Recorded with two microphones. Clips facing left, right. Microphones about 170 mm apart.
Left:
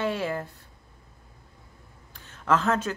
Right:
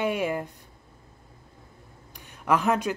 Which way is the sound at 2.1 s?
15° right (ahead or behind).